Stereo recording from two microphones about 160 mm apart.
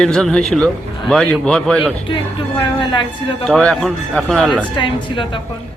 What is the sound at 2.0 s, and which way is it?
Speech, 30° left (ahead or behind).